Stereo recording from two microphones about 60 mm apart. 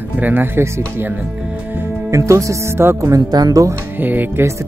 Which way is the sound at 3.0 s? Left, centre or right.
Right.